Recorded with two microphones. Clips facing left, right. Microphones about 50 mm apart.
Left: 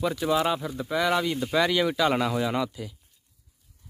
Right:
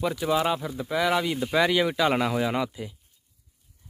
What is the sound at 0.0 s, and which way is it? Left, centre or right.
Speech, centre.